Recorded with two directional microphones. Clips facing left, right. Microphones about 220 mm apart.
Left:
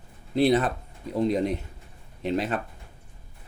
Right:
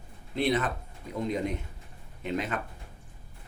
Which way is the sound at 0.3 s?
35° left (ahead or behind).